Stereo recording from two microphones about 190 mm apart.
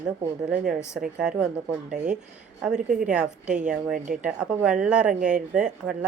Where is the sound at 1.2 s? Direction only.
5° right (ahead or behind).